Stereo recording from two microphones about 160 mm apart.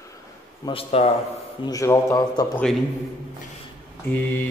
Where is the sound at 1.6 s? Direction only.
20° left (ahead or behind).